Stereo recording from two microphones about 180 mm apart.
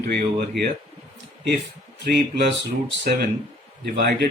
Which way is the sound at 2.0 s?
70° right (ahead or behind).